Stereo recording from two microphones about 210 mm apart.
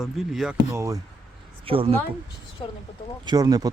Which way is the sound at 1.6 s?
25° right (ahead or behind).